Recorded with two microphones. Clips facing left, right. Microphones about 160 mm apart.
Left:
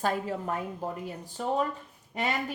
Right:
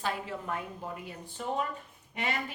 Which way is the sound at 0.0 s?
45° left (ahead or behind).